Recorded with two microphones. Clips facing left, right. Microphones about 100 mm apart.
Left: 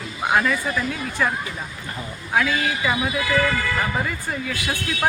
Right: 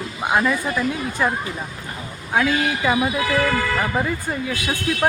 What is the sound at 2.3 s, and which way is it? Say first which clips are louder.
Speech: right 2 dB; 25° right (ahead or behind).